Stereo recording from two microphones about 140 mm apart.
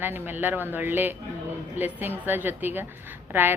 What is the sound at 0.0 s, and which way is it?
A man's voice, 15° right (ahead or behind).